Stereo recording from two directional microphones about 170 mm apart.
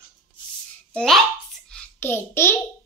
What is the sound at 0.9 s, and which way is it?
Speech, centre (ahead or behind).